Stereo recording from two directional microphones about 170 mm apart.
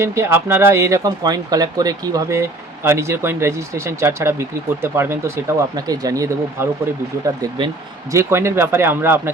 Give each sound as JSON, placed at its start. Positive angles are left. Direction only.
{"t": 0.0, "sound": "speech", "side_deg": -15}
{"t": 8.1, "sound": "speech", "side_deg": -15}